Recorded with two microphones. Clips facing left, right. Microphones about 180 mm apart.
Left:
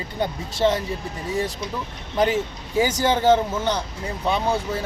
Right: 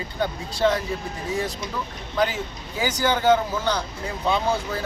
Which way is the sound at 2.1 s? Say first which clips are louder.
Left 3 dB; 25° left (ahead or behind).